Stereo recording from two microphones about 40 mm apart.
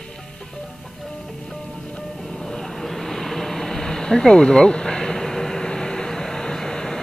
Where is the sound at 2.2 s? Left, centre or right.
Centre.